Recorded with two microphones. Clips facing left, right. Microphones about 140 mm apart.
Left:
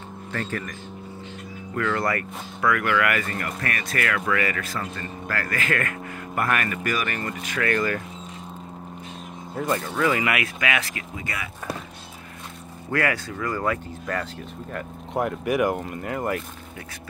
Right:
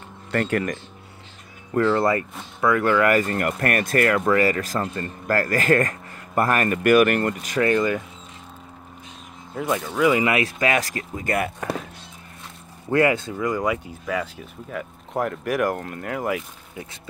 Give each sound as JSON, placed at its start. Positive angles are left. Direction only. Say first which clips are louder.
{"t": 0.3, "sound": "speech", "louder": "right 8 dB", "side_deg": -70}
{"t": 1.8, "sound": "speech", "louder": "right 6 dB", "side_deg": -30}
{"t": 6.8, "sound": "speech", "louder": "right 11 dB", "side_deg": -60}
{"t": 7.6, "sound": "speech", "louder": "right 4 dB", "side_deg": -20}
{"t": 9.6, "sound": "speech", "louder": "right 2 dB", "side_deg": -10}
{"t": 10.2, "sound": "speech", "louder": "right 4 dB", "side_deg": -30}
{"t": 12.9, "sound": "speech", "louder": "right 6 dB", "side_deg": -25}